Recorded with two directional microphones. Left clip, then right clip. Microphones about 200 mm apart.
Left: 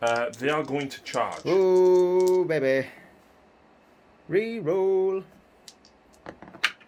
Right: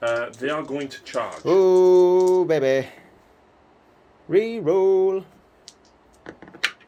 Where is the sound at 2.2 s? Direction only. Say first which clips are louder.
Right 4 dB; 20° right (ahead or behind).